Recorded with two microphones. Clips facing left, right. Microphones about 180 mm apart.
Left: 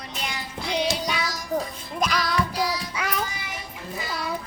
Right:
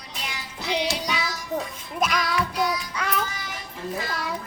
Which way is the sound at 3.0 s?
10° left (ahead or behind).